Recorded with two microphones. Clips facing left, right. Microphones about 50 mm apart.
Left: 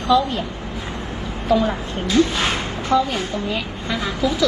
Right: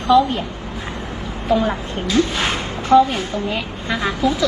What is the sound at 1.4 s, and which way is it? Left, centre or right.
A woman's voice, right.